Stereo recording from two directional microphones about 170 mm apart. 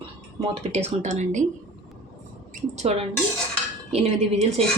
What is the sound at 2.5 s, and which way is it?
A woman's voice, 40° right (ahead or behind).